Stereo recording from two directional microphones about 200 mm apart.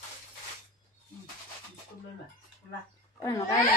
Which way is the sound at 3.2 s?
15° left (ahead or behind).